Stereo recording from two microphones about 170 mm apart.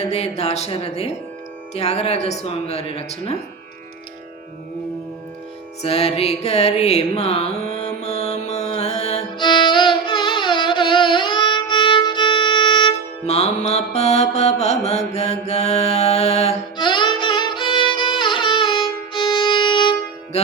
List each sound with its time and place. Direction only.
0.1 s speech: 40° left (ahead or behind)
5.8 s music: 35° left (ahead or behind)
9.4 s music: 25° left (ahead or behind)
13.2 s mantra: 40° left (ahead or behind)
16.7 s music: 25° left (ahead or behind)